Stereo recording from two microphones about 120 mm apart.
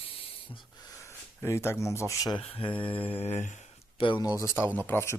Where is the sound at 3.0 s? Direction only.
50° left (ahead or behind).